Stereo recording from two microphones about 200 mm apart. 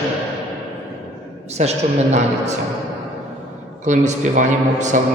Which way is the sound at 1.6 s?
35° right (ahead or behind).